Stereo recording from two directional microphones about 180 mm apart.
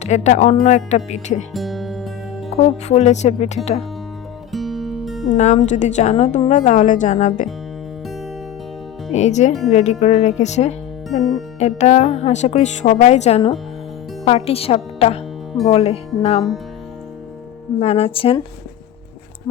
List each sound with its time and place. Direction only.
0.0 s a woman's voice: 40° left (ahead or behind)
1.5 s music: centre (ahead or behind)
2.6 s a woman's voice: 35° left (ahead or behind)
4.5 s music: centre (ahead or behind)
5.4 s a woman's voice: 40° left (ahead or behind)
9.1 s a woman's voice: 40° left (ahead or behind)
11.2 s speech: centre (ahead or behind)
11.6 s a woman's voice: 35° left (ahead or behind)
17.7 s a woman's voice: 35° left (ahead or behind)